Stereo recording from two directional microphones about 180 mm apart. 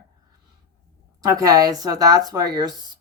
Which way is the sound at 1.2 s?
20° right (ahead or behind).